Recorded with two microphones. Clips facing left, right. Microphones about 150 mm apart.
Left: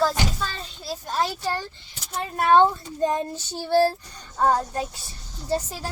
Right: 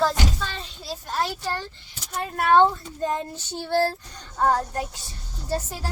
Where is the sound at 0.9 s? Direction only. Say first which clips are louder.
Left 1 dB; 15° left (ahead or behind).